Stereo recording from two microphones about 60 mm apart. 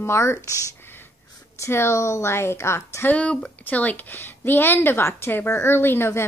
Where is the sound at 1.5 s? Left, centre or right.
Left.